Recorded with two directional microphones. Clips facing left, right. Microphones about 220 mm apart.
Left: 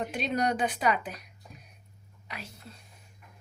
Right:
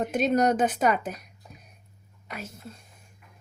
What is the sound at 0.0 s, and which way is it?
A woman's voice, 45° right (ahead or behind).